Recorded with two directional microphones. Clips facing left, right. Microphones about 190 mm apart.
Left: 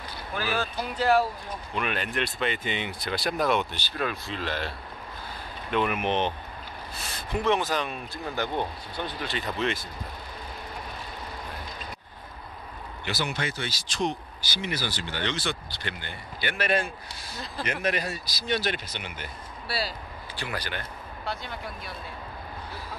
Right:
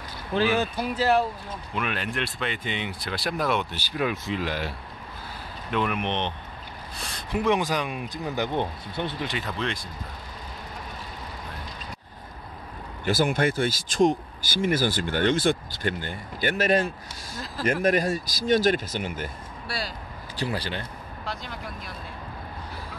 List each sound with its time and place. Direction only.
0.3 s speech: 25° right (ahead or behind)
0.7 s speech: centre (ahead or behind)
5.7 s speech: 5° left (ahead or behind)
7.3 s speech: 10° right (ahead or behind)
9.4 s speech: centre (ahead or behind)
13.0 s speech: 45° right (ahead or behind)
20.3 s speech: 30° right (ahead or behind)
21.3 s speech: centre (ahead or behind)